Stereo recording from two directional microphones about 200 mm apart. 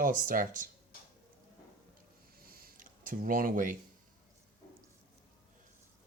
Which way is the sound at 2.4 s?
50° right (ahead or behind).